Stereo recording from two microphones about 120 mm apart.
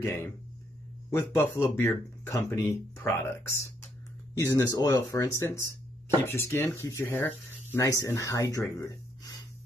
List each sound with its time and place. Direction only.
0.0 s speech: 20° left (ahead or behind)